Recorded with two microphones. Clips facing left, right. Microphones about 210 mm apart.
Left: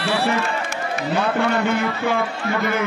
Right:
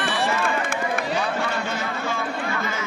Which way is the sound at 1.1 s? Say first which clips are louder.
Left 5 dB; 60° left (ahead or behind).